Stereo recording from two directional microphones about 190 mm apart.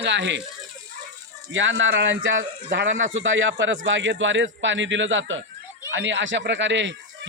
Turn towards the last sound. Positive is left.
turn(degrees=-70)  # may be behind; listen again after turning